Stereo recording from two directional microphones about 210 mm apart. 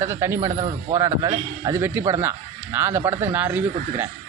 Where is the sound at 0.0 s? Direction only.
10° right (ahead or behind).